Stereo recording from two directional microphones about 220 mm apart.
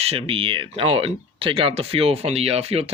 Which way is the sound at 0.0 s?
25° right (ahead or behind).